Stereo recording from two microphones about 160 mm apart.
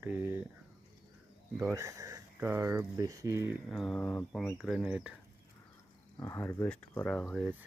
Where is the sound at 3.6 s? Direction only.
Centre (ahead or behind).